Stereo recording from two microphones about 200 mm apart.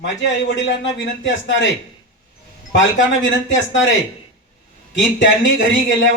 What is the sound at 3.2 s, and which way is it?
Speech, 65° left (ahead or behind).